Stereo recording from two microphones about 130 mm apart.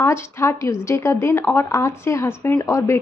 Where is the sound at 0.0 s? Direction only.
20° left (ahead or behind).